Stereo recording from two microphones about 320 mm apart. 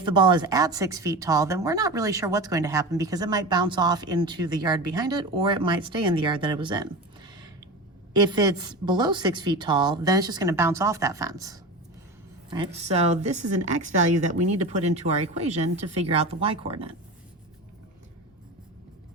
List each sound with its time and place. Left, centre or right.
0.0 s speech: centre